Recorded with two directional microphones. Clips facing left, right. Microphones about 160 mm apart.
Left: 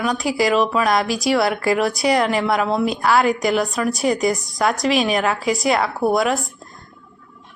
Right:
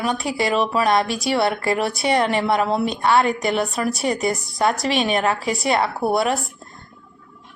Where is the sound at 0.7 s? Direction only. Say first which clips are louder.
Even; 30° right (ahead or behind).